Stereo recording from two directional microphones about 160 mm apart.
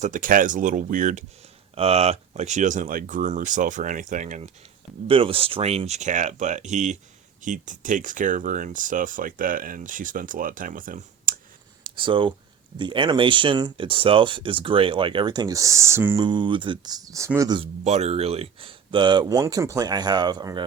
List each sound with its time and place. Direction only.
0.0 s speech: 55° right (ahead or behind)
1.7 s speech: 40° right (ahead or behind)
5.0 s speech: 35° right (ahead or behind); by 11.3 s 55° right (ahead or behind)
11.8 s speech: 30° right (ahead or behind); by 16.2 s 15° right (ahead or behind)
16.2 s speech: 30° right (ahead or behind)
17.6 s speech: 45° right (ahead or behind); by 20.7 s 25° right (ahead or behind)